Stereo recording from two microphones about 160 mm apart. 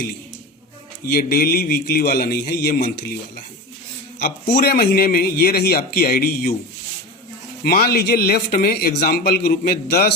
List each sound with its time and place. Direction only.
1.0 s a man's voice: 65° left (ahead or behind)
4.2 s a man's voice: 80° left
7.6 s a man's voice: 75° left (ahead or behind)